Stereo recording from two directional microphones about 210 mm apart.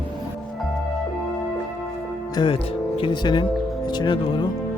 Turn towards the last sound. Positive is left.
turn(degrees=20)  # may be behind; listen again after turning